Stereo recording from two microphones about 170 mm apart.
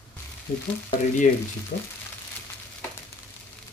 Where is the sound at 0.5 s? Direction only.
55° left (ahead or behind).